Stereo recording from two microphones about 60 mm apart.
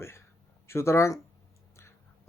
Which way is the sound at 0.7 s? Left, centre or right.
Left.